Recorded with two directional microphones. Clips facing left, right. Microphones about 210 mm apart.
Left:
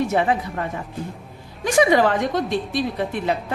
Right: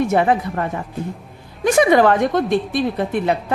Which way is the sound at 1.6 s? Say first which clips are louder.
Right 3 dB; 55° right (ahead or behind).